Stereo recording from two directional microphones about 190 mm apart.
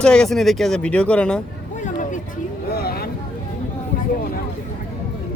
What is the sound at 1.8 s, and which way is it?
Vehicle, 40° left (ahead or behind).